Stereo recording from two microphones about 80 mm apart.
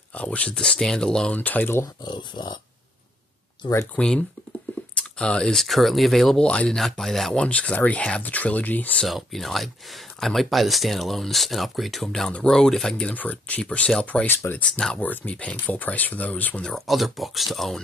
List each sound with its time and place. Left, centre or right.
0.1 s speech: centre
2.0 s speech: left
3.9 s speech: centre
7.4 s speech: centre
9.0 s speech: centre
12.9 s speech: centre
16.6 s speech: centre